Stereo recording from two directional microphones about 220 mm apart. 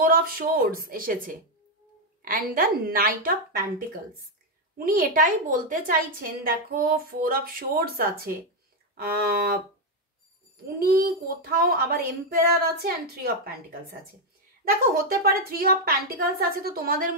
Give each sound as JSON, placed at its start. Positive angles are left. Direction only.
{"t": 0.0, "sound": "a woman's voice", "side_deg": -40}
{"t": 4.7, "sound": "speech", "side_deg": -40}
{"t": 10.8, "sound": "speech", "side_deg": -40}